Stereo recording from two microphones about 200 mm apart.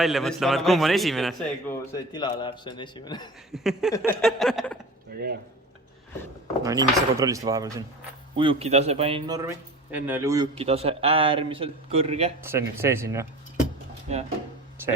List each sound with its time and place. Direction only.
0.0 s a man's voice: centre (ahead or behind)
1.9 s a man's voice: 20° left (ahead or behind)
3.5 s a man's voice: centre (ahead or behind)
5.1 s speech: 45° right (ahead or behind)
6.6 s a man's voice: 15° right (ahead or behind)
10.5 s a man's voice: 30° right (ahead or behind)
12.4 s speech: 10° right (ahead or behind)
14.1 s speech: 30° right (ahead or behind)